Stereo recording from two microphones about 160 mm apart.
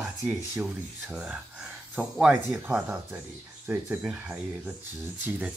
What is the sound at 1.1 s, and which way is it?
Speech, 10° right (ahead or behind).